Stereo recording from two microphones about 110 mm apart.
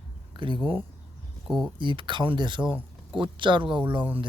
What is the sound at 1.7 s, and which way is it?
Speech, 45° right (ahead or behind).